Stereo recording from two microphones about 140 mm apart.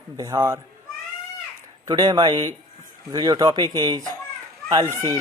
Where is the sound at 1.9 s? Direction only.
30° right (ahead or behind).